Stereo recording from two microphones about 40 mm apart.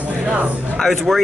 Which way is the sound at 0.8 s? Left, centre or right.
Centre.